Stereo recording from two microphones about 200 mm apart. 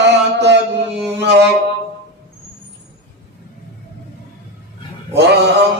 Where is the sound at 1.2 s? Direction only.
60° right (ahead or behind).